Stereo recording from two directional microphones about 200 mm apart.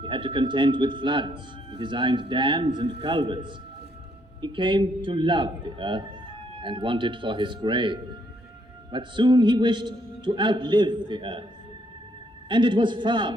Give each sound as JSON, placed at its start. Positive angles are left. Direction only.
{"t": 0.0, "sound": "a man's voice", "side_deg": -25}
{"t": 12.5, "sound": "a man's voice", "side_deg": -25}